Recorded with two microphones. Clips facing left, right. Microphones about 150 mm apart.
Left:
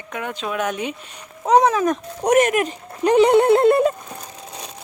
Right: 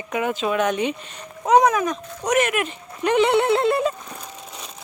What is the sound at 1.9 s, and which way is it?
Speech, 50° left (ahead or behind).